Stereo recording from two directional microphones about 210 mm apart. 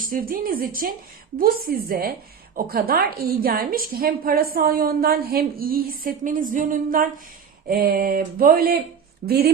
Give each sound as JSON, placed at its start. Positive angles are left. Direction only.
{"t": 0.1, "sound": "a woman's voice", "side_deg": -45}